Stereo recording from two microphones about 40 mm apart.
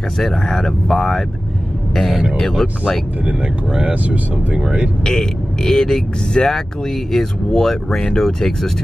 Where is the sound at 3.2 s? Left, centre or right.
Right.